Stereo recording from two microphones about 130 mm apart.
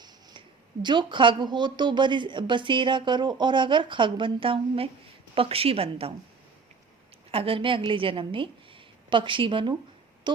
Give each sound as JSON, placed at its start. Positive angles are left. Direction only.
{"t": 0.0, "sound": "a woman's voice", "side_deg": -35}
{"t": 7.3, "sound": "speech", "side_deg": -45}